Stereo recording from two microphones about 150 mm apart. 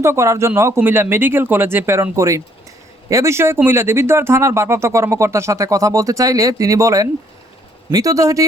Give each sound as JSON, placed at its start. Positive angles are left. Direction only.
{"t": 0.0, "sound": "speech", "side_deg": -20}